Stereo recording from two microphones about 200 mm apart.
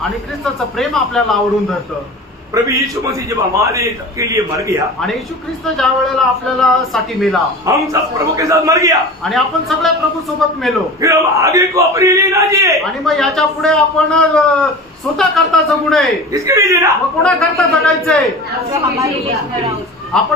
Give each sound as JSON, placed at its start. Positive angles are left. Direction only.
{"t": 0.7, "sound": "a man's voice", "side_deg": 0}
{"t": 2.5, "sound": "a man's voice", "side_deg": -15}
{"t": 5.8, "sound": "a man's voice", "side_deg": 0}
{"t": 7.6, "sound": "a man's voice", "side_deg": -15}
{"t": 9.2, "sound": "a man's voice", "side_deg": 0}
{"t": 11.0, "sound": "a man's voice", "side_deg": -15}
{"t": 13.0, "sound": "a man's voice", "side_deg": 0}
{"t": 16.3, "sound": "a man's voice", "side_deg": -15}
{"t": 17.2, "sound": "a man's voice", "side_deg": 0}
{"t": 20.1, "sound": "a man's voice", "side_deg": 5}